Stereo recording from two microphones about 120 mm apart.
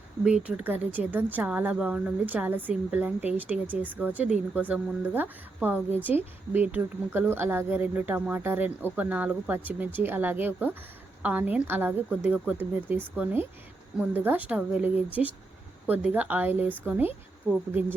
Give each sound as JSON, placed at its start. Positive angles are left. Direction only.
{"t": 0.3, "sound": "speech", "side_deg": -5}